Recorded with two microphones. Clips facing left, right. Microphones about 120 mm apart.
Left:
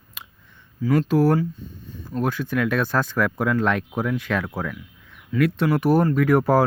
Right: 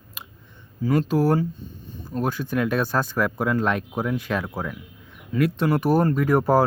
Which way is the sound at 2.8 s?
10° right (ahead or behind).